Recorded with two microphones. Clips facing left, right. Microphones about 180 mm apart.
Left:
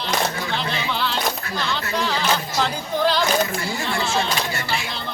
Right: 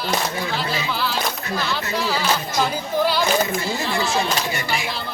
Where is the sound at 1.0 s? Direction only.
5° right (ahead or behind).